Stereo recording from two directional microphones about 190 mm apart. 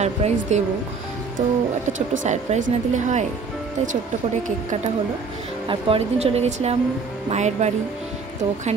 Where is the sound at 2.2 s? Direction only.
40° right (ahead or behind).